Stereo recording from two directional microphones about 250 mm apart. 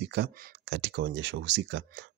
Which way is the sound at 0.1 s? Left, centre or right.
Right.